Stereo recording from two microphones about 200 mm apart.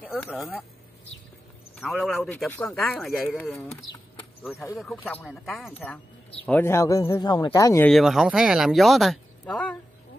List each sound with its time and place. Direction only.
0.0 s a sound: 10° left (ahead or behind)
0.3 s speech: centre (ahead or behind)
1.8 s speech: centre (ahead or behind)
7.9 s speech: centre (ahead or behind)